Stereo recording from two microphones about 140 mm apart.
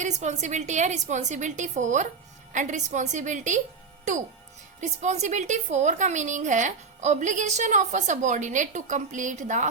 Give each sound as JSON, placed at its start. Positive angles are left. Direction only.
{"t": 0.0, "sound": "a woman's voice", "side_deg": -60}
{"t": 4.8, "sound": "a woman's voice", "side_deg": -55}